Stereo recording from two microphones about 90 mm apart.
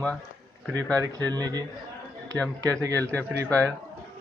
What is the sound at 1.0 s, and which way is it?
Speech, 40° right (ahead or behind).